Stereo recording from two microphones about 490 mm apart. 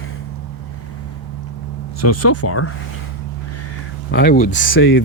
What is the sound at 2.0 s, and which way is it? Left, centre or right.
Speech, left.